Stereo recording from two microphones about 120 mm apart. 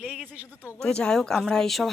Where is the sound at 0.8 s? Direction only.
5° left (ahead or behind).